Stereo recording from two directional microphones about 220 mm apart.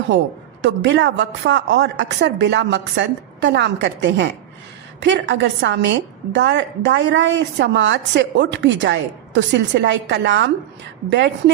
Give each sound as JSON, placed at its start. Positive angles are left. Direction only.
{"t": 0.1, "sound": "a woman's voice", "side_deg": -55}